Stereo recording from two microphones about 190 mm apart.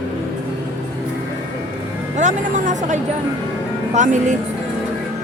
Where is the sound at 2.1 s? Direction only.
40° right (ahead or behind).